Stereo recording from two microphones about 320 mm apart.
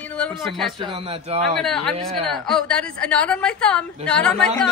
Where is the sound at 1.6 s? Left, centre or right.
Centre.